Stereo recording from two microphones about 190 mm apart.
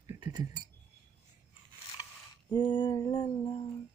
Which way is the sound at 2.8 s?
10° left (ahead or behind).